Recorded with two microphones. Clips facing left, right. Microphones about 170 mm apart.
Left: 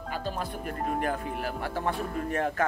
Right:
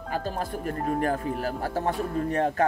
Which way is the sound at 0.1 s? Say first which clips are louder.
Right 4 dB; 40° right (ahead or behind).